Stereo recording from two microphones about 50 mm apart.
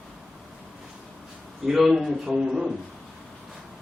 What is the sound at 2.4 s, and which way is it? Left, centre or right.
Speech, right.